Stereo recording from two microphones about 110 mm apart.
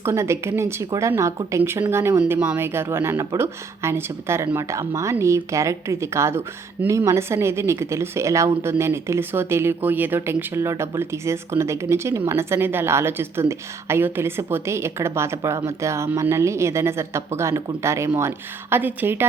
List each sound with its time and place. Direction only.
0.0 s speech: 25° right (ahead or behind)